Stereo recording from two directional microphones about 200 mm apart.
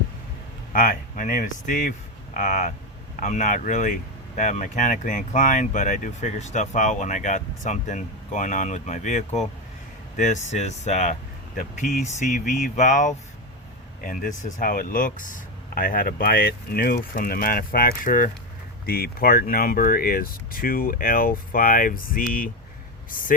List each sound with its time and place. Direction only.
0.7 s speech: 40° left (ahead or behind)